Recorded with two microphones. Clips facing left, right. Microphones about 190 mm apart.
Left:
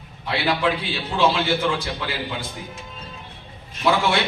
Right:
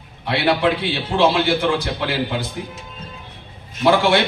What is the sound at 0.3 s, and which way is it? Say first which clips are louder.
A man's voice: right 4 dB; 65° right (ahead or behind).